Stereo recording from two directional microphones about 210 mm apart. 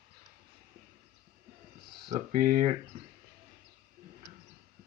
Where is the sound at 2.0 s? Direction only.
40° right (ahead or behind).